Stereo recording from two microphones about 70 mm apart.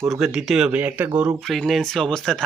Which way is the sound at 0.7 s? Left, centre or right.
Right.